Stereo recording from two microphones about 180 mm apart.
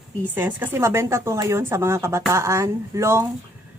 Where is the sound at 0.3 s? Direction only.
10° right (ahead or behind).